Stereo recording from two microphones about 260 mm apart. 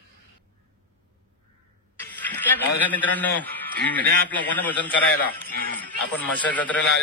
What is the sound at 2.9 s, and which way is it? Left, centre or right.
A man's voice, centre.